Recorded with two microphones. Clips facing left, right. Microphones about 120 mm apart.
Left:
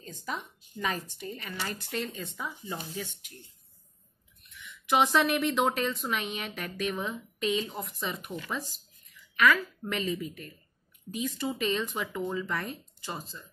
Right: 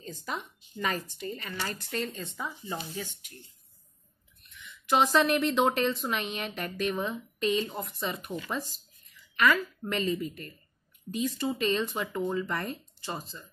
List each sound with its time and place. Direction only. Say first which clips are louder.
0.7 s a woman's voice: right 1 dB; centre (ahead or behind)
2.3 s a woman's voice: right 1 dB; centre (ahead or behind)
4.8 s a woman's voice: right 1 dB; centre (ahead or behind)